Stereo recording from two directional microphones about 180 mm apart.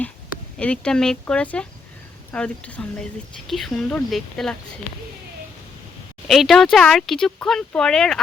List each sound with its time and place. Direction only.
0.6 s speech: 5° left (ahead or behind)
6.2 s speech: centre (ahead or behind)